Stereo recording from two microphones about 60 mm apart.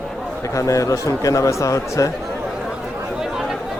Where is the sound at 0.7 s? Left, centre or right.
Left.